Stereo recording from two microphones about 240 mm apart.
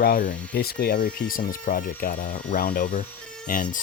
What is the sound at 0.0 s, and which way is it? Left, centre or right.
Speech, left.